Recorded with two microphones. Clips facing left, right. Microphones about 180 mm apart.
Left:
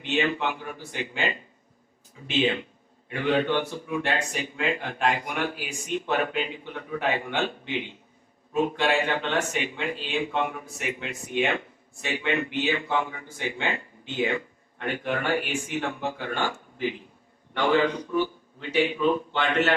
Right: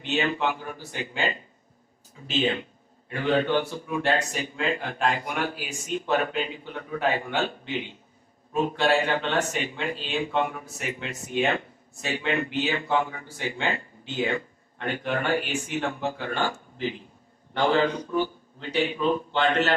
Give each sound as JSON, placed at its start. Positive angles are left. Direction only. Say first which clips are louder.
{"t": 0.0, "sound": "a man's voice", "louder": "even", "side_deg": -40}